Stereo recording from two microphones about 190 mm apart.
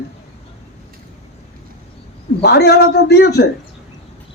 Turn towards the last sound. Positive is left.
turn(degrees=60)  # may be behind; listen again after turning